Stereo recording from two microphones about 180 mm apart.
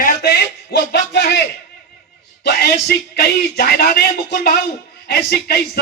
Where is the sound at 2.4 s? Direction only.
65° left (ahead or behind).